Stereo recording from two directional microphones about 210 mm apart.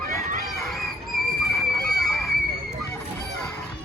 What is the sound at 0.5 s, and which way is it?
Goose, centre (ahead or behind).